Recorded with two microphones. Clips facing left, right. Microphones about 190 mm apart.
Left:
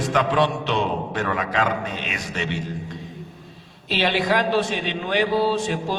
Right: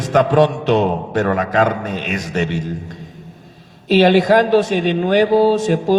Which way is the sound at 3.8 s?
45° right (ahead or behind).